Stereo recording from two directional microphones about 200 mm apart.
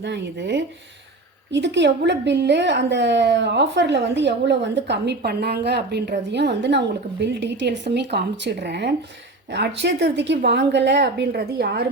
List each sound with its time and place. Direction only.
0.0 s a woman's voice: 60° right (ahead or behind)